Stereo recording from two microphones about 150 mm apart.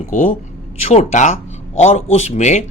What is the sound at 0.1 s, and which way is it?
Speech, 55° left (ahead or behind).